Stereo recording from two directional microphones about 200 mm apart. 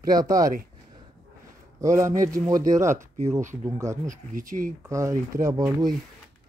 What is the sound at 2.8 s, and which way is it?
Speech, 40° right (ahead or behind).